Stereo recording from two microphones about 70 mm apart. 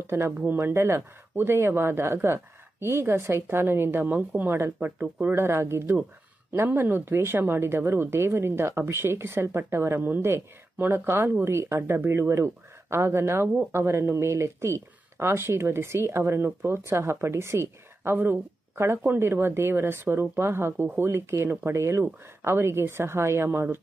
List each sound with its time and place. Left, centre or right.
0.0 s speech: right